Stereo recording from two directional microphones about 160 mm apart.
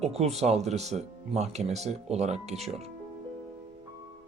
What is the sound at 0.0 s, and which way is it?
Speech, 40° right (ahead or behind).